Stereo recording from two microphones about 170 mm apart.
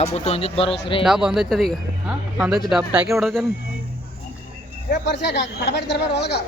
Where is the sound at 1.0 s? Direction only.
5° right (ahead or behind).